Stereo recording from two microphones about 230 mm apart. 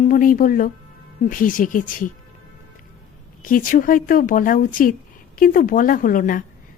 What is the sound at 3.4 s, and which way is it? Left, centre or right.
Speech, left.